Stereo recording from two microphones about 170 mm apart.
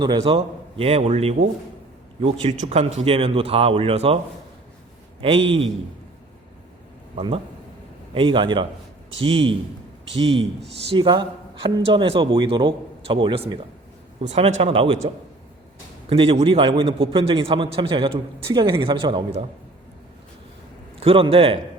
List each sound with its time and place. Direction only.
0.0 s a man's voice: 30° right (ahead or behind)
2.6 s a man's voice: 35° right (ahead or behind)
5.2 s a man's voice: 35° right (ahead or behind)
8.1 s a man's voice: 30° right (ahead or behind)
16.0 s a man's voice: 35° right (ahead or behind)
21.0 s a man's voice: 35° right (ahead or behind)